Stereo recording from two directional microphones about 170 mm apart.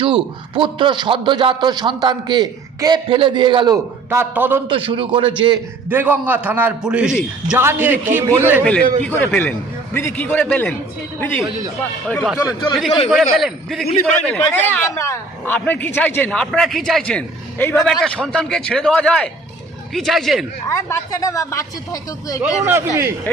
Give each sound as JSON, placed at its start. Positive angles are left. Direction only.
{"t": 0.0, "sound": "a man's voice", "side_deg": -30}
{"t": 4.1, "sound": "a man's voice", "side_deg": -15}
{"t": 4.7, "sound": "a man's voice", "side_deg": -30}
{"t": 5.9, "sound": "a man's voice", "side_deg": -10}
{"t": 9.0, "sound": "a man's voice", "side_deg": 10}
{"t": 12.4, "sound": "speech", "side_deg": 20}
{"t": 13.1, "sound": "a man's voice", "side_deg": 0}
{"t": 20.7, "sound": "speech", "side_deg": 15}
{"t": 22.6, "sound": "a man's voice", "side_deg": -15}